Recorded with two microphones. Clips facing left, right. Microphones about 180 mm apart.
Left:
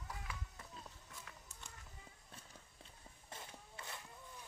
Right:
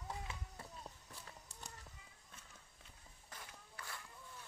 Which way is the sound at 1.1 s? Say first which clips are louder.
Even; 35° right (ahead or behind).